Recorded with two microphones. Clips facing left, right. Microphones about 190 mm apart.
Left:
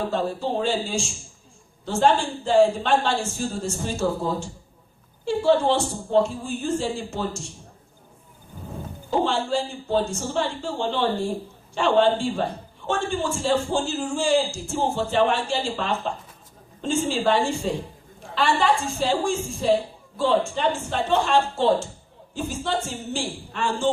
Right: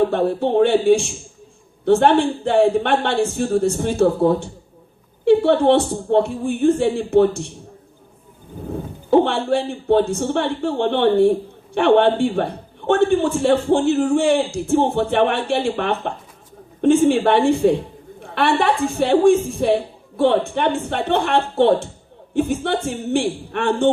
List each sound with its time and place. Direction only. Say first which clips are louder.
0.0 s a man's voice: right 8 dB; 60° right (ahead or behind)
9.0 s a man's voice: right 8 dB; 60° right (ahead or behind)